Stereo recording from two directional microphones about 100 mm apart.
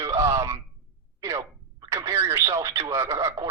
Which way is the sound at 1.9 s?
30° right (ahead or behind).